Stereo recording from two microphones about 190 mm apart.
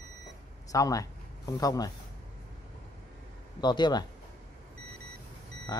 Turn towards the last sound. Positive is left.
turn(degrees=20)  # may be behind; listen again after turning